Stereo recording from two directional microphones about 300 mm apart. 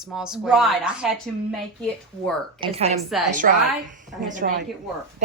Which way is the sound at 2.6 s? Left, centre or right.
Centre.